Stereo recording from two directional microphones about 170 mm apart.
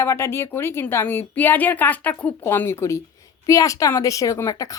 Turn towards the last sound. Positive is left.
turn(degrees=20)  # may be behind; listen again after turning